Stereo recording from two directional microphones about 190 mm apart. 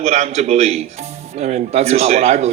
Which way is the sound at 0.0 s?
35° right (ahead or behind).